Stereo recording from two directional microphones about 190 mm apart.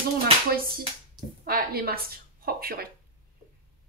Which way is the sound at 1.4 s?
55° right (ahead or behind).